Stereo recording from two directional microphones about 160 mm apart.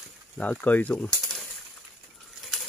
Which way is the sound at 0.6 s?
10° left (ahead or behind).